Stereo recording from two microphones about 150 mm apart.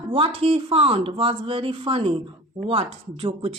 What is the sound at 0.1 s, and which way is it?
Speech, 40° right (ahead or behind).